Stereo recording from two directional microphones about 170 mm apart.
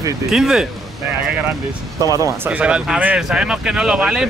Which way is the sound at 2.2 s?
10° right (ahead or behind).